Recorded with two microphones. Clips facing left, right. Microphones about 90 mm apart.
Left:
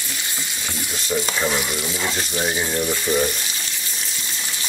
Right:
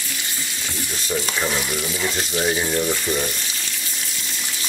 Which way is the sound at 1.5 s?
20° left (ahead or behind).